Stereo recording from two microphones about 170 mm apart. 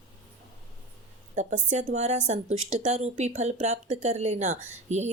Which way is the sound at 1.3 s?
45° right (ahead or behind).